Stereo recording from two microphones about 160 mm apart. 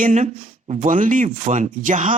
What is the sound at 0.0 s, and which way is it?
Speech, 50° right (ahead or behind).